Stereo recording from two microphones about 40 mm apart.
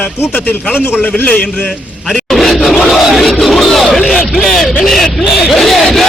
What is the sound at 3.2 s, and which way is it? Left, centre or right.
Crowd, centre.